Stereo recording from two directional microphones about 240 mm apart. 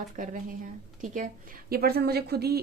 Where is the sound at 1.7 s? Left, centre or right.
Right.